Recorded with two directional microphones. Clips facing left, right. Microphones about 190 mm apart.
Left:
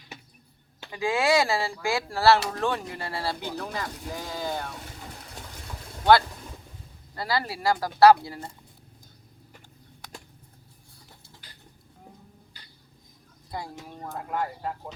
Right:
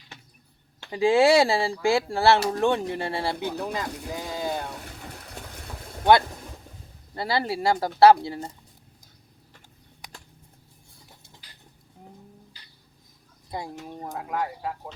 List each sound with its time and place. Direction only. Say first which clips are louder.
0.9 s speech: right 6 dB; 30° right (ahead or behind)
4.4 s vehicle: right 2 dB; 15° right (ahead or behind)
7.2 s speech: right 3 dB; 25° right (ahead or behind)
13.5 s speech: right 2 dB; 20° right (ahead or behind)
14.3 s speech: right 1 dB; 5° right (ahead or behind)